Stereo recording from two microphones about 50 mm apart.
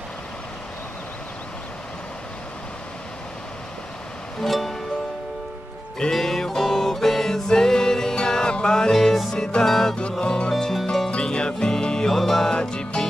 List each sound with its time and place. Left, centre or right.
4.4 s music: centre
5.9 s music: centre
8.9 s music: centre
9.3 s music: centre
10.6 s harp: centre
11.1 s music: centre